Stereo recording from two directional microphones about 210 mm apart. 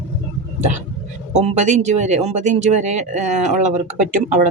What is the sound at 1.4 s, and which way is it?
Speech, 35° right (ahead or behind).